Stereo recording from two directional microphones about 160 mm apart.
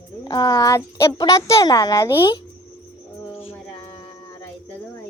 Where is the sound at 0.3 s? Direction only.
25° left (ahead or behind).